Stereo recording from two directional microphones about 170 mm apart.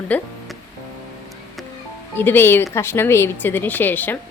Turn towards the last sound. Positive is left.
turn(degrees=10)  # may be behind; listen again after turning